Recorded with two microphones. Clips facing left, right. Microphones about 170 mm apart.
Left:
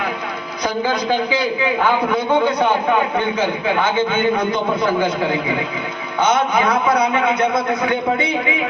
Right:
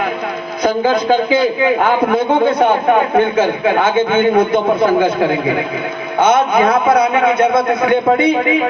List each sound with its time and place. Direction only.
0.6 s a man's voice: 50° right (ahead or behind)
6.1 s a man's voice: 55° right (ahead or behind)